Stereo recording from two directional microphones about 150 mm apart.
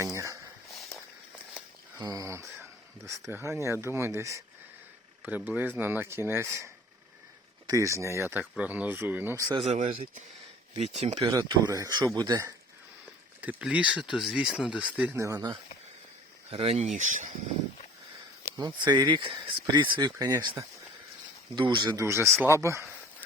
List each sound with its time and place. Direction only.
0.0 s a sound: 20° right (ahead or behind)
0.8 s walk: centre (ahead or behind)
2.0 s speech: 25° right (ahead or behind)
7.7 s speech: 20° right (ahead or behind)
9.4 s speech: 30° right (ahead or behind)
9.6 s speech: 55° right (ahead or behind)
11.2 s speech: 25° right (ahead or behind)
13.4 s speech: 10° right (ahead or behind)
15.2 s speech: 20° right (ahead or behind)
16.5 s speech: 45° right (ahead or behind); by 17.3 s 60° right (ahead or behind)
18.5 s speech: 25° right (ahead or behind)
21.5 s speech: 30° right (ahead or behind)
22.0 s speech: 20° right (ahead or behind)